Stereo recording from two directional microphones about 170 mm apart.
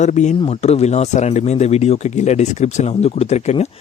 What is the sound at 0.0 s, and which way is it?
Speech, 45° left (ahead or behind).